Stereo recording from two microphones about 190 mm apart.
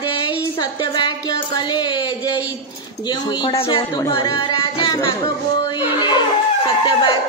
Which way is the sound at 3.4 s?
25° left (ahead or behind).